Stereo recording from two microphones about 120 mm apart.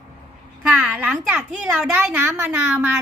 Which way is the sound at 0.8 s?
10° right (ahead or behind).